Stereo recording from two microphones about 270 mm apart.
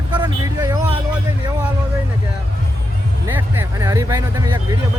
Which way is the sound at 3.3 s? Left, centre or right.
Centre.